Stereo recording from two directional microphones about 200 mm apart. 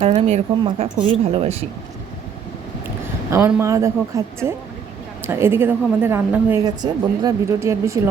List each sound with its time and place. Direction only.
0.0 s speech: 30° right (ahead or behind)
2.8 s a woman's voice: 10° right (ahead or behind)